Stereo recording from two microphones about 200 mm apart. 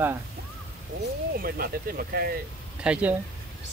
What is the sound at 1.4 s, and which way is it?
Speech, 50° right (ahead or behind).